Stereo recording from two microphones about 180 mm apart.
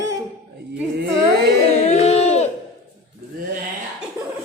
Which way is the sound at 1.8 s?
35° left (ahead or behind).